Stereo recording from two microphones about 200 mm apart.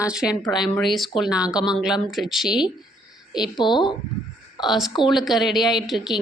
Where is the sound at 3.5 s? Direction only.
20° left (ahead or behind).